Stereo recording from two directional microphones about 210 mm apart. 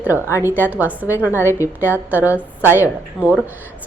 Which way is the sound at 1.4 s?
10° left (ahead or behind).